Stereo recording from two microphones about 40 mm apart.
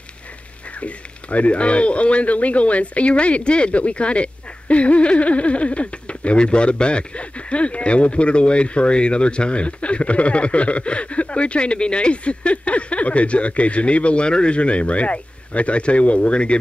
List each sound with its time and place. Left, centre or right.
0.7 s speech: left